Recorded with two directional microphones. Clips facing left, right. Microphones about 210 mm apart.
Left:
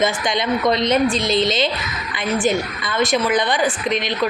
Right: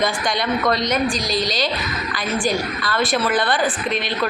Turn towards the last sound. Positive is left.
turn(degrees=15)  # may be behind; listen again after turning